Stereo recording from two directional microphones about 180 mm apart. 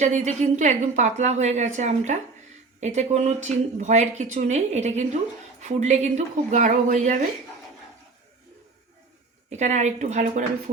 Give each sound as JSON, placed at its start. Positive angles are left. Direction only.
{"t": 0.0, "sound": "speech", "side_deg": -40}
{"t": 9.5, "sound": "speech", "side_deg": -40}